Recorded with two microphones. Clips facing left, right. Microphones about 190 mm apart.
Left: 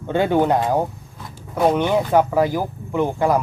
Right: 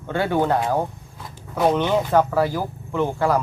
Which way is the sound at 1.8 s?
10° left (ahead or behind).